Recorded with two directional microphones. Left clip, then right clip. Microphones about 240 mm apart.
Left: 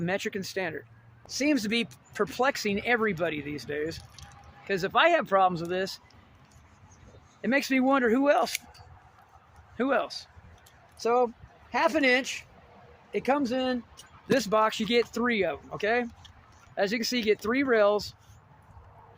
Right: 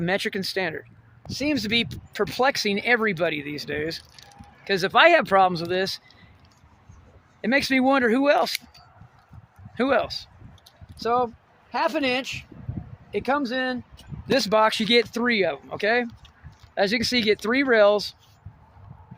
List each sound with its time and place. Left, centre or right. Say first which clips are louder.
0.0 s speech: right 6 dB; right
1.3 s speech: right 3 dB; centre; by 6.0 s right
7.4 s speech: right 5 dB; right
9.7 s speech: right 5 dB; right
10.9 s speech: right 2 dB; centre
13.1 s speech: right 2 dB; centre
14.3 s speech: right 5 dB; right